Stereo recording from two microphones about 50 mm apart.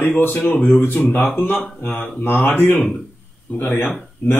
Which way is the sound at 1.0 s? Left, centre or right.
Left.